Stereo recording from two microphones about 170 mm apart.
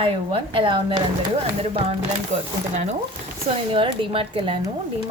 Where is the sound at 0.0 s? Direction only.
35° right (ahead or behind).